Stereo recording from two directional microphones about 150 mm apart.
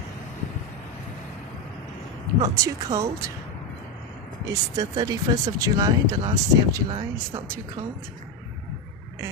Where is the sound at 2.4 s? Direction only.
25° right (ahead or behind).